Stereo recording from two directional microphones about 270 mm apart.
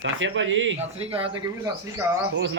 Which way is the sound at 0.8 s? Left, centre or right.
Right.